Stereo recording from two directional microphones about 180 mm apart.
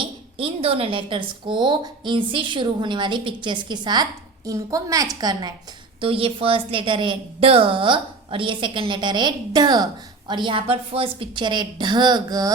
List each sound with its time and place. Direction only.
0.0 s a woman's voice: 30° right (ahead or behind)